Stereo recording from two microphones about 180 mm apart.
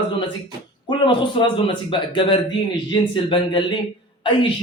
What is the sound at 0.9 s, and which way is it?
A man's voice, 25° left (ahead or behind).